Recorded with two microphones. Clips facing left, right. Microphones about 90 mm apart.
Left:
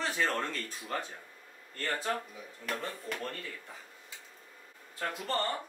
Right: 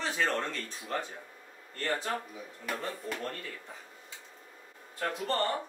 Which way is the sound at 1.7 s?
Centre (ahead or behind).